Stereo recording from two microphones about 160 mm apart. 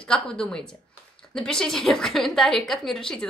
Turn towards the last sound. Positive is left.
turn(degrees=5)  # may be behind; listen again after turning